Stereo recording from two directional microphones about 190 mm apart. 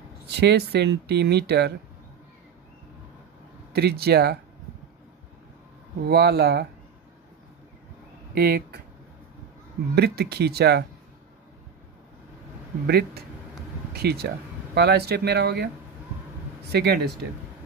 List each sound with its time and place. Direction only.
0.3 s speech: 60° right (ahead or behind)
3.7 s speech: 55° right (ahead or behind)
6.0 s speech: 60° right (ahead or behind)
8.4 s speech: 55° right (ahead or behind)
9.9 s speech: 60° right (ahead or behind)
12.8 s speech: 55° right (ahead or behind)
16.7 s speech: 60° right (ahead or behind)